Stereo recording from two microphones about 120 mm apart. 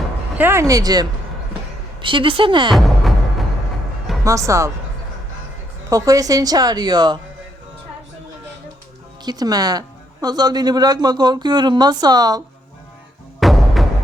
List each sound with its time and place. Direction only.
0.3 s speech: 20° right (ahead or behind)
2.0 s a woman's voice: 45° right (ahead or behind)
2.7 s music: centre (ahead or behind)
4.2 s speech: 25° right (ahead or behind)
5.9 s a woman's voice: 30° right (ahead or behind)
9.2 s a woman's voice: 35° right (ahead or behind)
13.4 s music: centre (ahead or behind)